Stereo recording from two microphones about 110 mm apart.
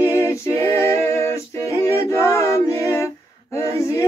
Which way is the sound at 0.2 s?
25° left (ahead or behind).